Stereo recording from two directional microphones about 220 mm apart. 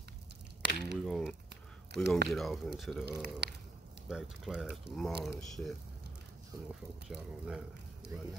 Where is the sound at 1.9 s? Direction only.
50° right (ahead or behind).